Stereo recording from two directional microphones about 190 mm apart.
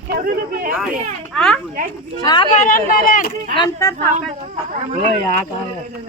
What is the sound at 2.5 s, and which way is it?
Speech, 45° left (ahead or behind).